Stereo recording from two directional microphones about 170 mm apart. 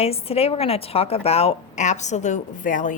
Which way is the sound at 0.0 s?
35° left (ahead or behind).